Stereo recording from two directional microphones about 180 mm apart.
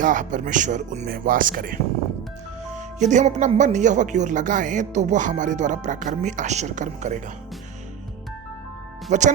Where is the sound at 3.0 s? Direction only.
40° right (ahead or behind).